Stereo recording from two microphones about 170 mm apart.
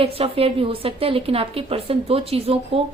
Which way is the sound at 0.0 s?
35° right (ahead or behind).